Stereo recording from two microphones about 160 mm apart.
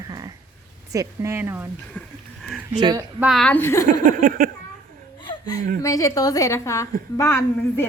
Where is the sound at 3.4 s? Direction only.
15° left (ahead or behind).